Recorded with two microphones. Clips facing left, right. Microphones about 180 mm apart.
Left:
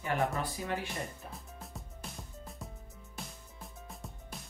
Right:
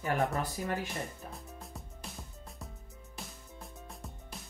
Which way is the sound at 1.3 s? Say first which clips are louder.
Right 1 dB; centre (ahead or behind).